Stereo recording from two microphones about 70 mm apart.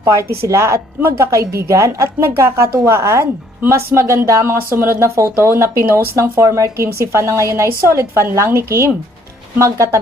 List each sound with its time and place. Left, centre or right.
0.4 s a woman's voice: right